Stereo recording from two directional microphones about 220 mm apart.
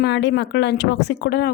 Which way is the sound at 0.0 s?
50° left (ahead or behind).